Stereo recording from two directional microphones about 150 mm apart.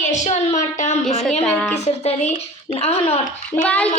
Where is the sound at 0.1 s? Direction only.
55° left (ahead or behind).